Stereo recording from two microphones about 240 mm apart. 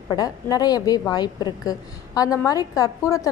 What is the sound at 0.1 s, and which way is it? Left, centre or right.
A woman's voice, centre.